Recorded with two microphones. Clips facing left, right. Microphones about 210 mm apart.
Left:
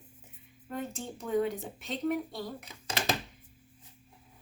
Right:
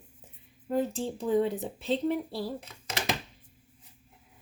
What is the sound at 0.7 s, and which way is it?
Speech, 30° right (ahead or behind).